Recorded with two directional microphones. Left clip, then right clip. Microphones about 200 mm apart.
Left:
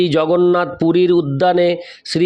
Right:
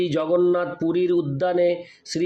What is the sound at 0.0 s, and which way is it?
Speech, 50° left (ahead or behind).